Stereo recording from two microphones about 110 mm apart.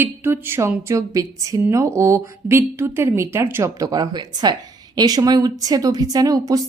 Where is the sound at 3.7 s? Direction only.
35° right (ahead or behind).